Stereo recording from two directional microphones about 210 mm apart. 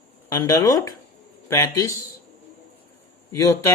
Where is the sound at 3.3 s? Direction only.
15° left (ahead or behind).